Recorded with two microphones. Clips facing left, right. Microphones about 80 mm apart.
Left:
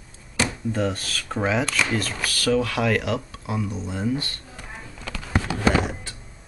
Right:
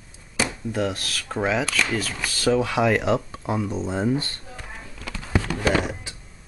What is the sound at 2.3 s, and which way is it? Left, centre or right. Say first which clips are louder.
Speech: right 1 dB; centre.